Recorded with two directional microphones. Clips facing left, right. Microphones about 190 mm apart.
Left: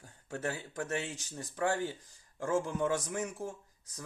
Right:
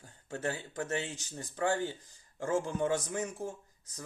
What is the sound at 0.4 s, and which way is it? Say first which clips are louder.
Speech: right 1 dB; 25° right (ahead or behind).